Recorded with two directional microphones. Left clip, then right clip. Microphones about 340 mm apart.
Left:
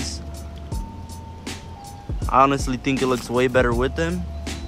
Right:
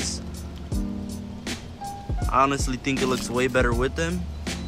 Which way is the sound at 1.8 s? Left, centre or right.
Centre.